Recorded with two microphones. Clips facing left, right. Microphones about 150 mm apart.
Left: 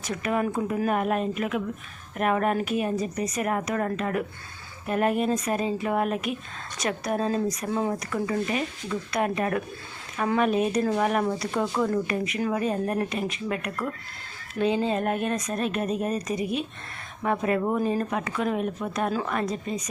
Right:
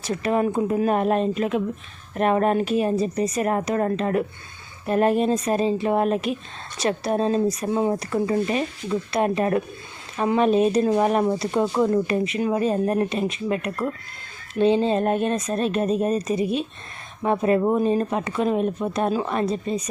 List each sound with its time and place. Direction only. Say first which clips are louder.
0.0 s speech: right 5 dB; 30° right (ahead or behind)